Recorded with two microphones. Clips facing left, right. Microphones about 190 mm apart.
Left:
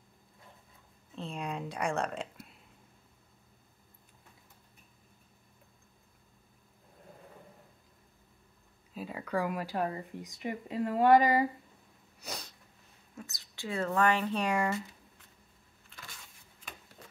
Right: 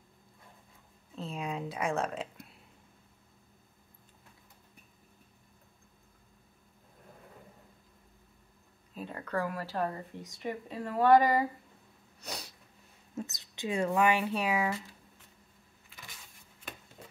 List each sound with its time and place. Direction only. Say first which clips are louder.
1.1 s a sound: right 1 dB; centre (ahead or behind)
8.9 s speech: left 1 dB; 5° left (ahead or behind)
12.2 s sneeze: even; 5° left (ahead or behind)
13.1 s speech: right 8 dB; 25° right (ahead or behind); by 14.8 s 5° right (ahead or behind)